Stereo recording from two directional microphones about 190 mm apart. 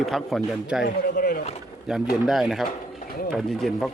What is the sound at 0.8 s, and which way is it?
Speech, 50° left (ahead or behind).